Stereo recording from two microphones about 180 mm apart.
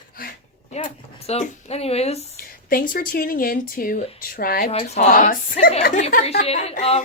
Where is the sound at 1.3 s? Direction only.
35° left (ahead or behind).